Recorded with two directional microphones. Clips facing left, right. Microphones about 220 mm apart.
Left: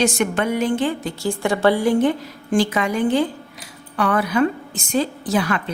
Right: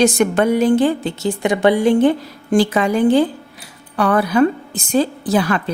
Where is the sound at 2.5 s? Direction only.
35° right (ahead or behind).